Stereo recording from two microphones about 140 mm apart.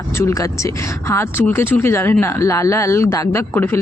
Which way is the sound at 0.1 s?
20° left (ahead or behind).